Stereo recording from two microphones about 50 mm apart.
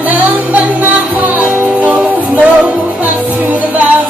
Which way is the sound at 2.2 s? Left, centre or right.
Right.